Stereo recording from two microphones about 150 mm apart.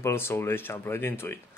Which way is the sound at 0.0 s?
15° left (ahead or behind).